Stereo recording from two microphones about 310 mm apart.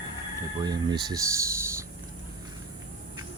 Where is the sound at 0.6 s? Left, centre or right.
Centre.